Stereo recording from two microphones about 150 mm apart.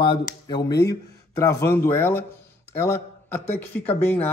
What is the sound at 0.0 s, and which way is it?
A man's voice, 30° left (ahead or behind).